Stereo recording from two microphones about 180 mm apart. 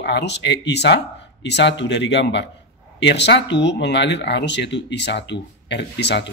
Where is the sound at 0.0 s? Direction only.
70° left (ahead or behind).